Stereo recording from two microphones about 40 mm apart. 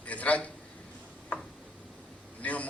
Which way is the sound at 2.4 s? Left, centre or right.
Left.